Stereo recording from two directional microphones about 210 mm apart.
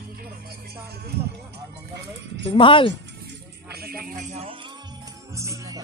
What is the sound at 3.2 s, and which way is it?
Music, 50° right (ahead or behind).